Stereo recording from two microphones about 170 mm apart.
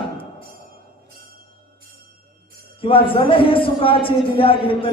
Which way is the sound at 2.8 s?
30° left (ahead or behind).